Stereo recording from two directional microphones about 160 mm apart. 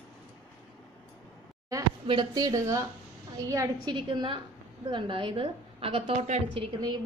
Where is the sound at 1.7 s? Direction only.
25° right (ahead or behind).